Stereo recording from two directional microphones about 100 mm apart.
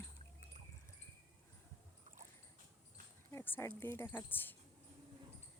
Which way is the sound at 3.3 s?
25° left (ahead or behind).